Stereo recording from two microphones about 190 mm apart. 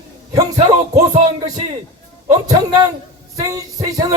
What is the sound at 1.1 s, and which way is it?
Music, 35° right (ahead or behind).